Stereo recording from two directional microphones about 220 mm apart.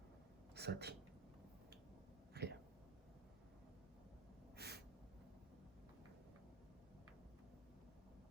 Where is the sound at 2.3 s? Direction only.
50° right (ahead or behind).